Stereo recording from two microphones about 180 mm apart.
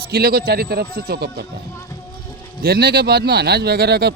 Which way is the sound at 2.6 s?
60° right (ahead or behind).